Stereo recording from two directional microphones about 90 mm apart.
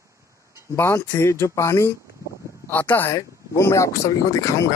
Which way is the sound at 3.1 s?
35° left (ahead or behind).